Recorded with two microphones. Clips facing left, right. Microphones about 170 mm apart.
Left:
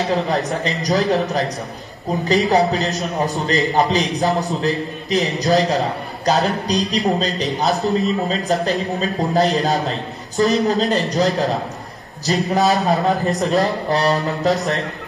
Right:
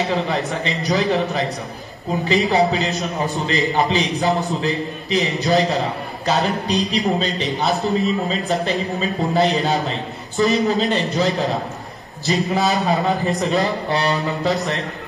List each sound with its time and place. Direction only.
0.0 s a man's voice: centre (ahead or behind)
3.4 s a man's voice: 40° left (ahead or behind)
4.0 s a man's voice: centre (ahead or behind)